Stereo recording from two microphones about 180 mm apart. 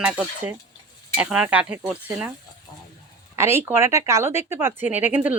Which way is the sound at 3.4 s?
15° right (ahead or behind).